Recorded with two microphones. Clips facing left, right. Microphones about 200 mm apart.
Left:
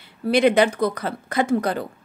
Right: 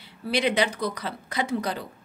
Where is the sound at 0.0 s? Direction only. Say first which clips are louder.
Left 8 dB; 50° left (ahead or behind).